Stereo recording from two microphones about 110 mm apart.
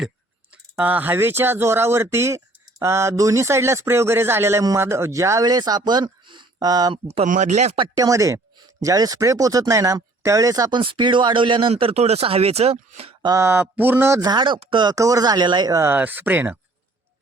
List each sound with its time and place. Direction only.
0.5 s speech: 15° right (ahead or behind); by 6.9 s 35° right (ahead or behind)
7.1 s speech: 85° right
7.9 s speech: 30° right (ahead or behind)
10.8 s speech: 50° right (ahead or behind)
11.7 s speech: 65° right (ahead or behind)
13.4 s speech: 20° right (ahead or behind)
14.2 s speech: 40° right (ahead or behind)
14.9 s speech: 30° right (ahead or behind)
15.8 s speech: 20° right (ahead or behind)